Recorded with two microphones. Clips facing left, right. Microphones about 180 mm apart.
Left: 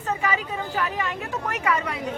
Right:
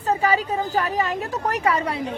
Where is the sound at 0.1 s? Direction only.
35° right (ahead or behind).